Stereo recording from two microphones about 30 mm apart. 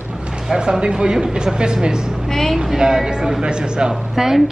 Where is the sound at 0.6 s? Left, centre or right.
Right.